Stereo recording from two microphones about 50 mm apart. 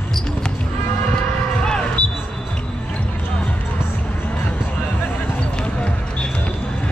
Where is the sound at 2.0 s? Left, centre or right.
Left.